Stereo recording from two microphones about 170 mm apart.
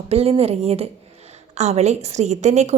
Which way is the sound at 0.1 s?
35° right (ahead or behind).